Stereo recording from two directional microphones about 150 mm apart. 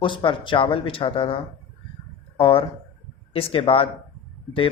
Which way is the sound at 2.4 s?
40° left (ahead or behind).